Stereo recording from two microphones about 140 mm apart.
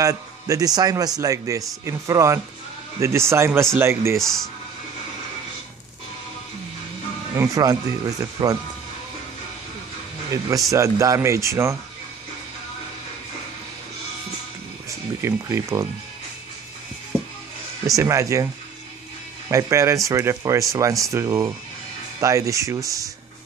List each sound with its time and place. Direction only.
0.0 s speech: 25° right (ahead or behind)
4.2 s speech: 5° left (ahead or behind)
7.3 s speech: 25° right (ahead or behind)
10.3 s speech: 25° right (ahead or behind)
14.9 s speech: 20° right (ahead or behind)
17.8 s speech: 25° right (ahead or behind)
19.5 s speech: 20° right (ahead or behind)